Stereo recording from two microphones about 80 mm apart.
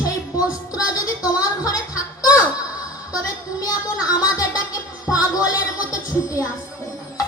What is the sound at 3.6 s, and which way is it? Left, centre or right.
Speech, left.